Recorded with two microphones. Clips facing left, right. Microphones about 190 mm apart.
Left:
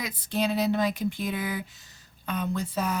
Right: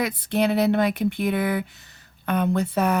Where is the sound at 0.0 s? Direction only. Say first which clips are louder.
Right 6 dB; 65° right (ahead or behind).